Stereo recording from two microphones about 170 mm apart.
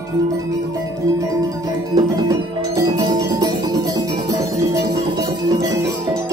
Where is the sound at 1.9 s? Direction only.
20° right (ahead or behind).